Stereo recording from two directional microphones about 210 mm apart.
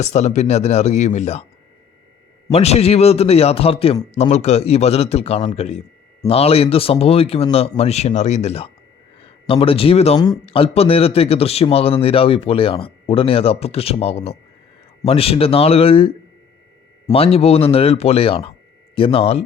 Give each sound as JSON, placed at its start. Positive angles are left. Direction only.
{"t": 0.0, "sound": "speech", "side_deg": 30}
{"t": 2.5, "sound": "speech", "side_deg": 30}